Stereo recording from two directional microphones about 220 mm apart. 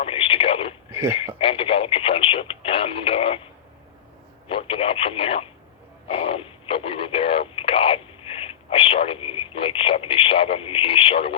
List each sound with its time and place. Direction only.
0.0 s a sound: 25° left (ahead or behind)
0.9 s speech: 10° right (ahead or behind)
1.4 s radio: 25° left (ahead or behind)
4.4 s speech: 25° left (ahead or behind)